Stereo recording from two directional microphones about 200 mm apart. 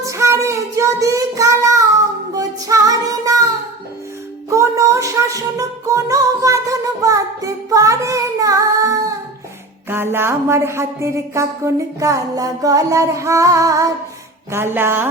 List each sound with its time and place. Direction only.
0.0 s child singing: 15° right (ahead or behind)
4.4 s music: 15° right (ahead or behind)
9.9 s speech: 10° right (ahead or behind)